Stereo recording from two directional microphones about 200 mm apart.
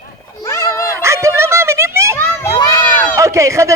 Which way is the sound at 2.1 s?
15° left (ahead or behind).